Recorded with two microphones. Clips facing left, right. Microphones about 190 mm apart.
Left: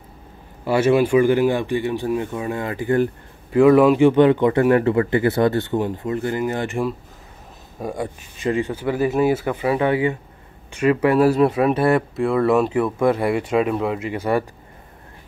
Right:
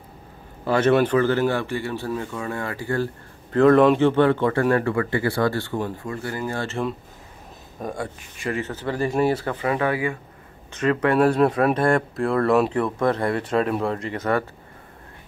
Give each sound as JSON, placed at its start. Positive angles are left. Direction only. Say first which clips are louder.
{"t": 0.7, "sound": "speech", "louder": "left 2 dB", "side_deg": 10}
{"t": 3.5, "sound": "speech", "louder": "left 2 dB", "side_deg": 10}
{"t": 7.9, "sound": "speech", "louder": "left 3 dB", "side_deg": 20}
{"t": 10.7, "sound": "speech", "louder": "left 3 dB", "side_deg": 10}